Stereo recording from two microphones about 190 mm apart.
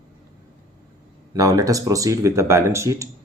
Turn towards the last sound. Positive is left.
turn(degrees=-15)  # may be behind; listen again after turning